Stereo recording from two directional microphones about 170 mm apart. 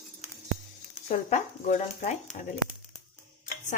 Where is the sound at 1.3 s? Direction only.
45° left (ahead or behind).